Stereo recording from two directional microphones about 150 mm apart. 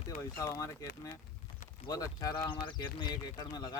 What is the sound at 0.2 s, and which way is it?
Speech, 20° left (ahead or behind).